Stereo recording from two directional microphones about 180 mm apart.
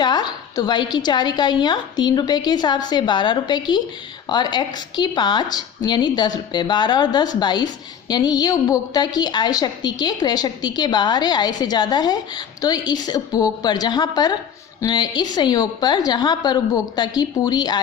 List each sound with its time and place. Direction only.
0.0 s a woman's voice: 25° left (ahead or behind)